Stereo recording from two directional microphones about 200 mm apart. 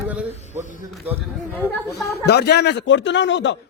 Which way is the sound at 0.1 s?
5° right (ahead or behind).